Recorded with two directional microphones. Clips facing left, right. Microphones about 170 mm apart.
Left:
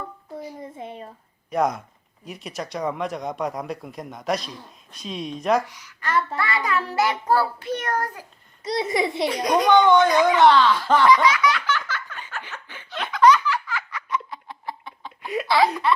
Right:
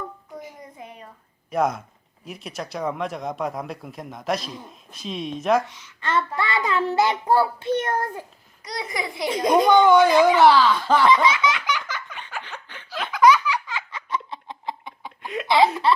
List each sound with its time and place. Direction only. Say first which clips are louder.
0.6 s a sound: left 5 dB; 25° left (ahead or behind)
1.5 s speech: even; centre (ahead or behind)
5.6 s child singing: right 1 dB; 25° right (ahead or behind)
8.6 s a child's voice: left 7 dB; 25° left (ahead or behind)
9.2 s child singing: right 5 dB; 25° right (ahead or behind)
9.7 s speech: even; 10° right (ahead or behind)
11.1 s child singing: left 1 dB; 25° right (ahead or behind)
11.6 s belly laugh: left 1 dB; 15° right (ahead or behind)
12.4 s laughter: right 1 dB; 10° left (ahead or behind)
12.9 s a sound: even; 5° right (ahead or behind)
15.4 s speech: right 2 dB; 20° right (ahead or behind)